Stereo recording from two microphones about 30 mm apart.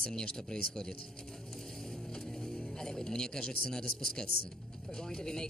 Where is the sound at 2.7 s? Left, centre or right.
Centre.